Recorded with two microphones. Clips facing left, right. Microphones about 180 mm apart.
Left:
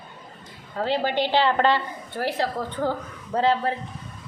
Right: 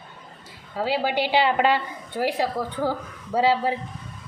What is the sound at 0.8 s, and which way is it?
A woman's voice, 5° right (ahead or behind).